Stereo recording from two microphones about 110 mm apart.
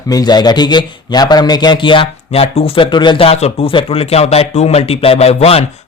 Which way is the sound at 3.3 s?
70° left (ahead or behind).